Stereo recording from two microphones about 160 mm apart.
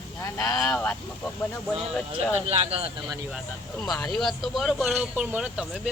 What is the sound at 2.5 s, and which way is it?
Speech, 35° right (ahead or behind).